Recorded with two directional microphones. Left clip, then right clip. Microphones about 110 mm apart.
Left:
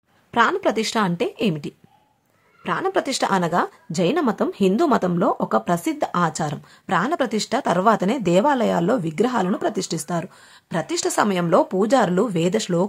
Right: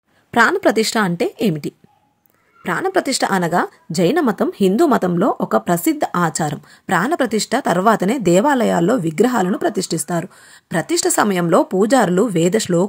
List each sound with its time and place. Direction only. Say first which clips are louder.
0.3 s a woman's voice: right 5 dB; 45° right (ahead or behind); by 12.8 s 30° right (ahead or behind)